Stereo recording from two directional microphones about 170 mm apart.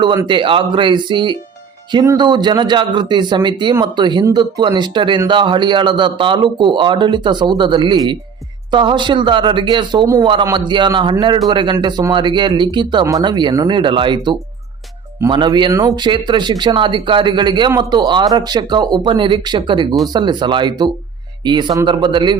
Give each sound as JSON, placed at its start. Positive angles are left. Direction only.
{"t": 0.0, "sound": "speech", "side_deg": -25}